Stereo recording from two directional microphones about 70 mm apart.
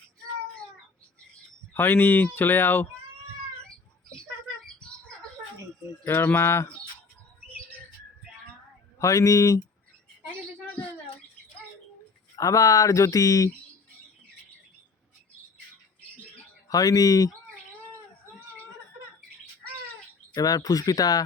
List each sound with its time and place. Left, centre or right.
1.7 s speech: left
4.6 s bird: centre
6.1 s speech: left
9.0 s speech: left
12.4 s speech: left
16.6 s speech: left
20.3 s speech: left